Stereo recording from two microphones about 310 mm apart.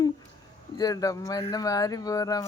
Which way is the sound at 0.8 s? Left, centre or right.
Centre.